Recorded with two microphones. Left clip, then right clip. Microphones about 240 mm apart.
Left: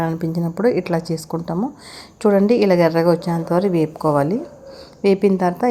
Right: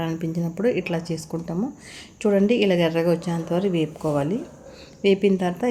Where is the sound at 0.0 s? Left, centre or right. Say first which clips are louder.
Left 5 dB; centre.